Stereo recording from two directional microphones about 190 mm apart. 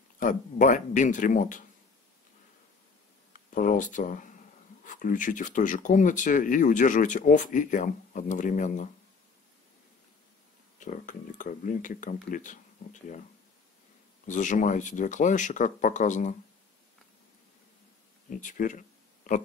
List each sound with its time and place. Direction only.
0.2 s speech: 45° left (ahead or behind)
3.3 s speech: 45° left (ahead or behind)
10.8 s speech: 40° left (ahead or behind)
14.2 s speech: 40° left (ahead or behind)
18.3 s speech: 45° left (ahead or behind)